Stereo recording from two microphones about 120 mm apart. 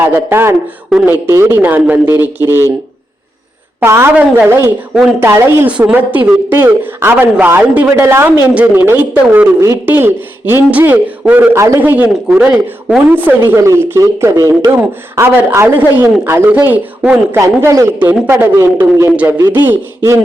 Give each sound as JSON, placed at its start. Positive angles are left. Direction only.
{"t": 0.0, "sound": "speech", "side_deg": -20}
{"t": 0.9, "sound": "speech", "side_deg": -5}
{"t": 1.1, "sound": "speech", "side_deg": -20}
{"t": 3.8, "sound": "speech", "side_deg": -20}
{"t": 11.5, "sound": "speech", "side_deg": -25}
{"t": 17.4, "sound": "speech", "side_deg": -25}
{"t": 19.1, "sound": "speech", "side_deg": -10}